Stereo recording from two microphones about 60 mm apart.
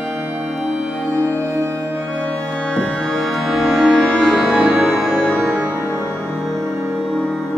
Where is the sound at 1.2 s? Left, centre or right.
Right.